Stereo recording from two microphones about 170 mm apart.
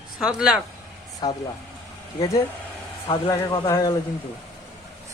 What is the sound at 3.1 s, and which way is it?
Speech, 25° left (ahead or behind).